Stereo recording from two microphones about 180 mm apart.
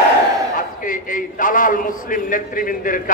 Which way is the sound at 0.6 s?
50° left (ahead or behind).